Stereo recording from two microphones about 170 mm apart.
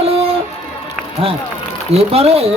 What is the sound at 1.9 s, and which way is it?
Speech, 35° right (ahead or behind).